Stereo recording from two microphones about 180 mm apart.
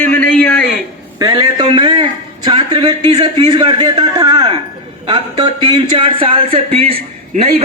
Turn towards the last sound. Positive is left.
turn(degrees=-35)  # may be behind; listen again after turning